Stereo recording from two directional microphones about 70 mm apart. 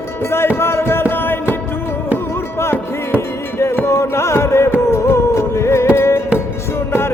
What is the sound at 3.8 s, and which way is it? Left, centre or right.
Music, left.